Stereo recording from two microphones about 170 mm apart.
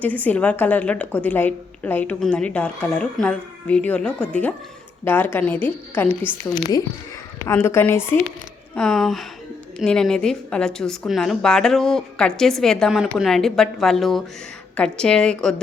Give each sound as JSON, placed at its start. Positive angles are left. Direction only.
{"t": 0.0, "sound": "a woman's voice", "side_deg": 10}
{"t": 6.5, "sound": "a woman's voice", "side_deg": 20}
{"t": 8.7, "sound": "a woman's voice", "side_deg": 0}